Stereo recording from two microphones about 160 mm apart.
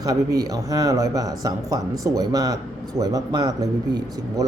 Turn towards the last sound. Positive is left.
turn(degrees=-20)  # may be behind; listen again after turning